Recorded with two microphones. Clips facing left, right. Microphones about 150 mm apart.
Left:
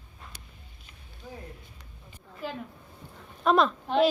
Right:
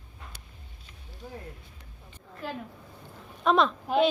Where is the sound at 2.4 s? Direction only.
Centre (ahead or behind).